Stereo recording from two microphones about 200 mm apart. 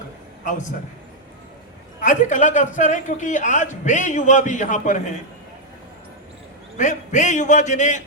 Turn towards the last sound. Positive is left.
turn(degrees=35)  # may be behind; listen again after turning